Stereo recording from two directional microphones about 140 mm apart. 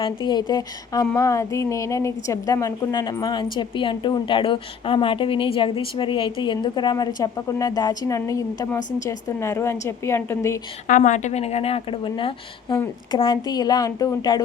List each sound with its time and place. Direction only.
0.3 s speech: 30° left (ahead or behind)
10.8 s a woman's voice: 65° left (ahead or behind); by 14.4 s 30° left (ahead or behind)